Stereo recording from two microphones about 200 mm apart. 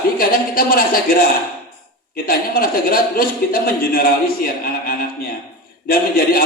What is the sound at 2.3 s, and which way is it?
Speech, 45° left (ahead or behind).